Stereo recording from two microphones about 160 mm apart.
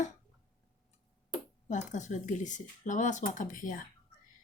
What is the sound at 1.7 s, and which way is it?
Speech, 50° left (ahead or behind).